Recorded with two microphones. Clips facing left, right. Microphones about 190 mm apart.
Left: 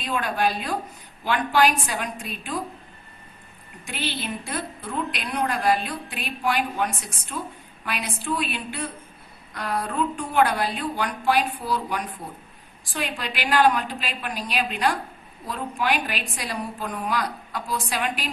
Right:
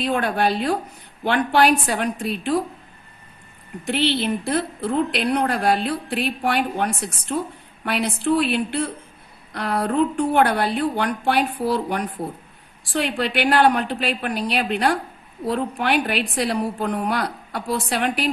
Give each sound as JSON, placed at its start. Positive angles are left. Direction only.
{"t": 0.0, "sound": "a woman's voice", "side_deg": -60}
{"t": 3.8, "sound": "a woman's voice", "side_deg": -70}
{"t": 13.2, "sound": "a woman's voice", "side_deg": -65}